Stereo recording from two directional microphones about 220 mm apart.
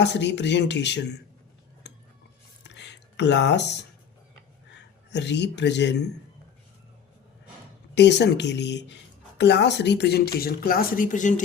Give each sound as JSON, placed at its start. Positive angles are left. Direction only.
{"t": 0.0, "sound": "speech", "side_deg": 50}
{"t": 2.7, "sound": "a sound", "side_deg": 55}
{"t": 4.7, "sound": "speech", "side_deg": 50}
{"t": 7.9, "sound": "speech", "side_deg": 50}